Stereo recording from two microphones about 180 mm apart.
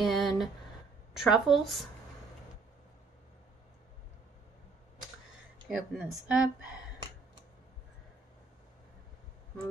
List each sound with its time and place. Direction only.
0.0 s a sound: centre (ahead or behind)
1.1 s speech: centre (ahead or behind)
5.7 s speech: 5° right (ahead or behind)